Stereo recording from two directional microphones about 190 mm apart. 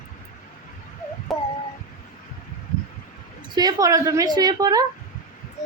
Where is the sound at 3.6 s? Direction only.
20° right (ahead or behind).